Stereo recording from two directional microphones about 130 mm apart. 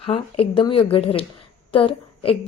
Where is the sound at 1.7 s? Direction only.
45° left (ahead or behind).